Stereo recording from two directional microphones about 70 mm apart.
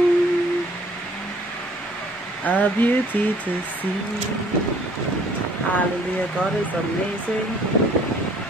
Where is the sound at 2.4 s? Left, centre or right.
Left.